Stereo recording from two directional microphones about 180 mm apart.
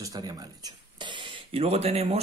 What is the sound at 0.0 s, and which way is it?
Speech, 20° right (ahead or behind).